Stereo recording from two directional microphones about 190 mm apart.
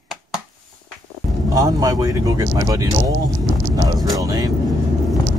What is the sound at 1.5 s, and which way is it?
Speech, 20° right (ahead or behind).